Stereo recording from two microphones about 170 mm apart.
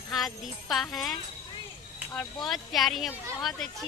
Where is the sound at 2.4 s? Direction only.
Centre (ahead or behind).